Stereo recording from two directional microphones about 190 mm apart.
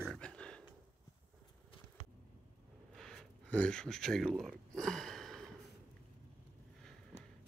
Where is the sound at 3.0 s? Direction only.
Centre (ahead or behind).